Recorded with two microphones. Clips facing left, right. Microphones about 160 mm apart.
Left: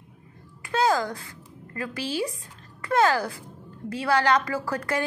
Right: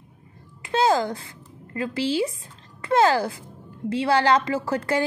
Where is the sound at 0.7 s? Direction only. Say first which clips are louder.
Right 3 dB; 25° right (ahead or behind).